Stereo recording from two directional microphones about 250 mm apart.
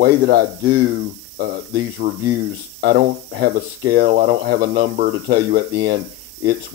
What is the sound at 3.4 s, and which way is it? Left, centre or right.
Speech, right.